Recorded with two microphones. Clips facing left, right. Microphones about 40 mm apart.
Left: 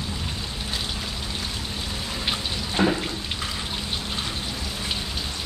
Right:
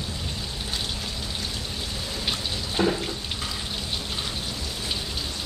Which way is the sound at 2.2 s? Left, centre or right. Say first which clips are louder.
Left 1 dB; centre.